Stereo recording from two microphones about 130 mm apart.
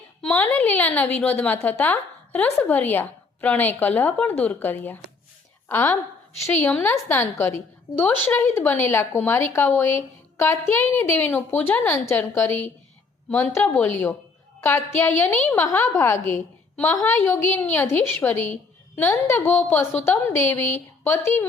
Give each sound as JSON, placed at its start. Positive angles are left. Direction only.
{"t": 0.2, "sound": "a woman's voice", "side_deg": 10}